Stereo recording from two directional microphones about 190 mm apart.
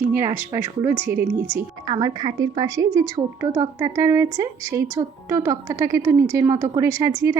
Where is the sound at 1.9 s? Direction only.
20° right (ahead or behind).